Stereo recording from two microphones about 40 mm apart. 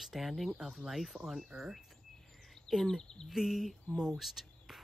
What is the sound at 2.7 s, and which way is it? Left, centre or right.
Speech, centre.